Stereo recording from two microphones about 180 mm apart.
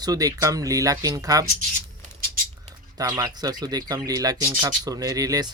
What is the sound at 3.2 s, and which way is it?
Speech, 20° right (ahead or behind).